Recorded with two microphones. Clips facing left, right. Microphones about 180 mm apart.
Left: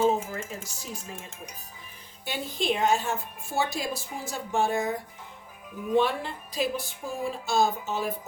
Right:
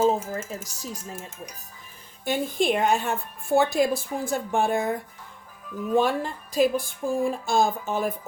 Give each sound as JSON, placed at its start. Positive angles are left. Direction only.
{"t": 0.0, "sound": "speech", "side_deg": -40}
{"t": 2.2, "sound": "speech", "side_deg": -50}
{"t": 5.9, "sound": "speech", "side_deg": -45}